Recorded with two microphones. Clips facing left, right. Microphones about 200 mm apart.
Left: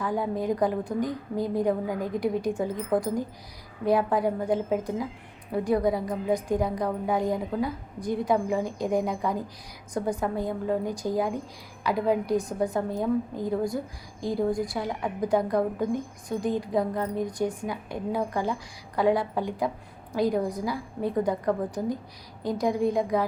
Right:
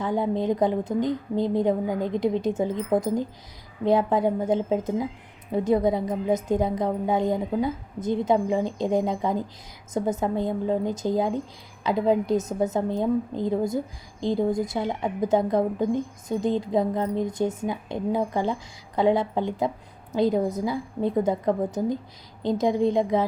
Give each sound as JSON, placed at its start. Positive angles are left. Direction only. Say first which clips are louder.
{"t": 0.0, "sound": "a woman's voice", "louder": "right 3 dB", "side_deg": -25}